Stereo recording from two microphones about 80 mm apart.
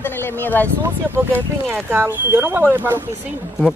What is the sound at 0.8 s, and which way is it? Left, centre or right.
Speech, right.